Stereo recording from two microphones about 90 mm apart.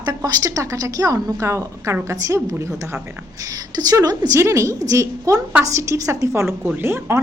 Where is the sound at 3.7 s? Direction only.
45° right (ahead or behind); by 7.2 s 25° right (ahead or behind).